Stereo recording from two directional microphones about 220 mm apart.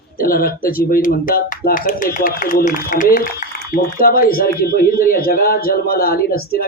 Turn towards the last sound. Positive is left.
turn(degrees=45)  # may be behind; listen again after turning